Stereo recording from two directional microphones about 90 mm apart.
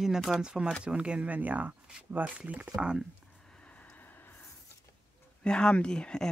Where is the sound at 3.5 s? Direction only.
10° left (ahead or behind).